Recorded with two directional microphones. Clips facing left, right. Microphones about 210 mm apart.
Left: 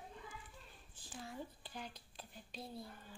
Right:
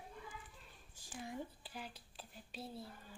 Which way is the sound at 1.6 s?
5° right (ahead or behind).